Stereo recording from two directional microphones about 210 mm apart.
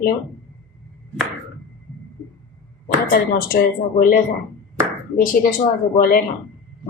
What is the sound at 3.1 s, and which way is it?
Speech, 40° left (ahead or behind).